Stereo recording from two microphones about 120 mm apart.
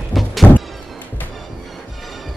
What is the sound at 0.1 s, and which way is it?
Music, centre (ahead or behind).